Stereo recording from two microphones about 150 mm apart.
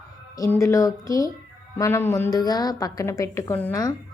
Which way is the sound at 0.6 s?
20° left (ahead or behind).